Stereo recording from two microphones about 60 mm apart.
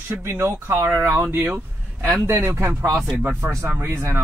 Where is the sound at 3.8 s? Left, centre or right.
Right.